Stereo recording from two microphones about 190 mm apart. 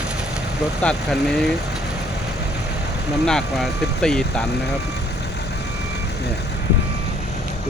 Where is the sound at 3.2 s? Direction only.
5° left (ahead or behind).